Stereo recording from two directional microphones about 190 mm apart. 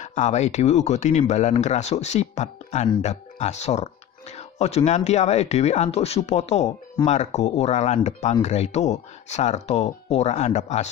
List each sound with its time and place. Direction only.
0.0 s speech: 40° left (ahead or behind)